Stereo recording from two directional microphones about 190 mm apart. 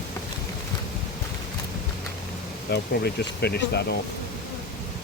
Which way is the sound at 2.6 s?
60° left (ahead or behind).